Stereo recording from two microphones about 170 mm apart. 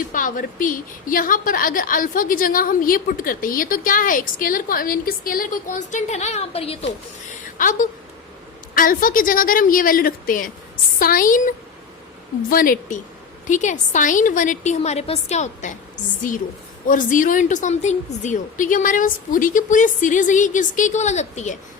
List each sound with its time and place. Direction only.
0.1 s a woman's voice: 50° left (ahead or behind); by 6.9 s 35° left (ahead or behind)
7.6 s a woman's voice: 50° left (ahead or behind)